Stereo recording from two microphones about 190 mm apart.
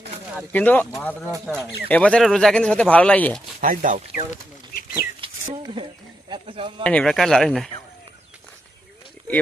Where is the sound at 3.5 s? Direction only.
45° right (ahead or behind).